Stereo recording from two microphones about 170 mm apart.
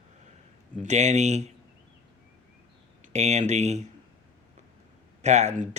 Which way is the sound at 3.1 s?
40° right (ahead or behind).